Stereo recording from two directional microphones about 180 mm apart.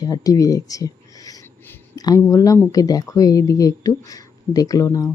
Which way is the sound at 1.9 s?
20° left (ahead or behind).